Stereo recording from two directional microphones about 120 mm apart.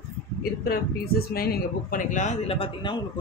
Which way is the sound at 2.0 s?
90° left.